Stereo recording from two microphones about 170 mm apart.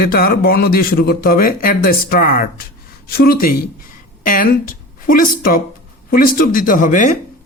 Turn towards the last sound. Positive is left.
turn(degrees=50)  # may be behind; listen again after turning